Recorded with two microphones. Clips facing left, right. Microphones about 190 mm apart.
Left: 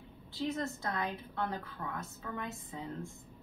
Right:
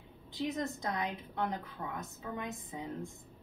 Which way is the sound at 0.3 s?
15° right (ahead or behind).